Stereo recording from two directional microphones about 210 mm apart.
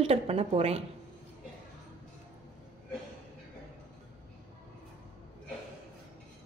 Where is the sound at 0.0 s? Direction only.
30° right (ahead or behind).